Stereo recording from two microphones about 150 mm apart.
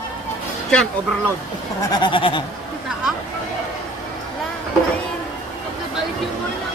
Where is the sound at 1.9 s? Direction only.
30° left (ahead or behind).